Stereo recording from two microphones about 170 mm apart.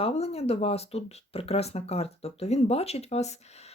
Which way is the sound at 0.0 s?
35° left (ahead or behind).